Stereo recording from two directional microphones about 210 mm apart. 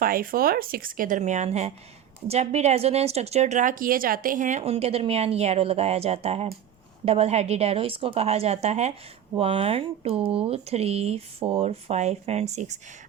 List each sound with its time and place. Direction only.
0.0 s speech: 45° right (ahead or behind)